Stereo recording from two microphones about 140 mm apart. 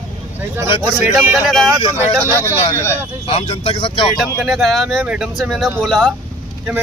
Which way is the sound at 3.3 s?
40° left (ahead or behind).